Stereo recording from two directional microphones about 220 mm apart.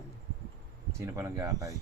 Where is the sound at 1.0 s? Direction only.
15° right (ahead or behind).